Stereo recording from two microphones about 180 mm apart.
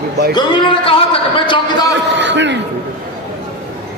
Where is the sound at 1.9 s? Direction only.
75° right (ahead or behind).